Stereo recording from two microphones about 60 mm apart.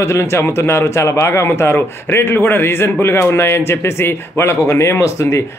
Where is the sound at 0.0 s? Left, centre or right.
Left.